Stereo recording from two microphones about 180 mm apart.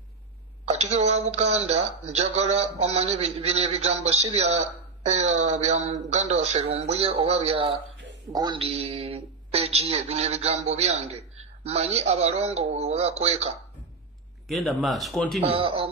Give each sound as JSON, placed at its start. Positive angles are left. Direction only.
{"t": 0.7, "sound": "speech", "side_deg": -35}
{"t": 14.5, "sound": "speech", "side_deg": 0}
{"t": 15.4, "sound": "speech", "side_deg": -30}